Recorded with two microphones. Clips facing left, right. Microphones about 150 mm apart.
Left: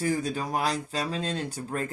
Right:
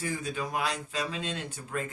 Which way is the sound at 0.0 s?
35° left (ahead or behind).